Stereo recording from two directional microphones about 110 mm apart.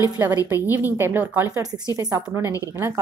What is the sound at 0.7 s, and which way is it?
A woman's voice, 20° right (ahead or behind).